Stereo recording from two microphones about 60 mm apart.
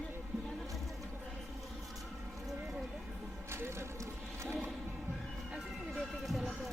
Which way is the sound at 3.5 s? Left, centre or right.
Right.